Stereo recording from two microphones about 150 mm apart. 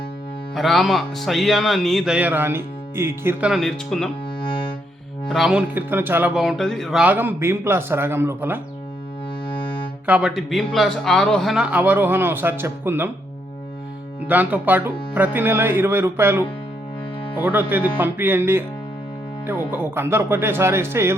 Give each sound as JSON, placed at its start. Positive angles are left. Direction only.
{"t": 0.5, "sound": "speech", "side_deg": 0}
{"t": 3.5, "sound": "speech", "side_deg": 0}
{"t": 5.3, "sound": "speech", "side_deg": 0}
{"t": 5.7, "sound": "a man's voice", "side_deg": -15}
{"t": 6.3, "sound": "a man's voice", "side_deg": 0}
{"t": 9.5, "sound": "music", "side_deg": 35}
{"t": 10.1, "sound": "a man's voice", "side_deg": -5}
{"t": 14.3, "sound": "a man's voice", "side_deg": -10}